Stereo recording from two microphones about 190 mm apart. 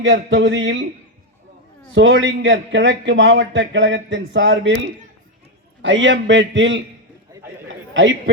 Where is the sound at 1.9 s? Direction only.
80° right.